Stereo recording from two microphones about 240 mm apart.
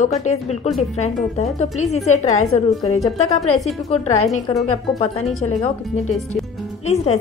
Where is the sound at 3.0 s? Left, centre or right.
Left.